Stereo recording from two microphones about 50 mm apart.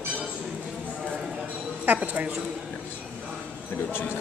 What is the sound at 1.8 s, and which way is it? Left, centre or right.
Speech, right.